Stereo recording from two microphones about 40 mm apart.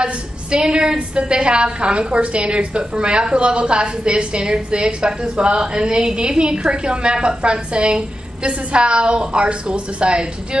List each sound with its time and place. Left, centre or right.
0.0 s a woman's voice: right